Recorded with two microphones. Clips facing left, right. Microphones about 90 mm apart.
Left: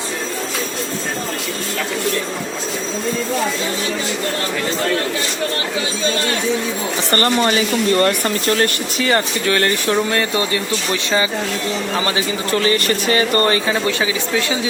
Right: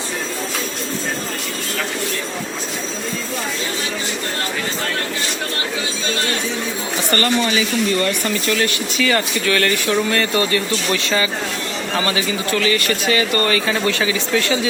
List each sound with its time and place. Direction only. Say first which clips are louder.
7.1 s speech: left 2 dB; 40° left (ahead or behind)
10.2 s speech: right 1 dB; 20° left (ahead or behind)
13.7 s speech: even; 15° left (ahead or behind)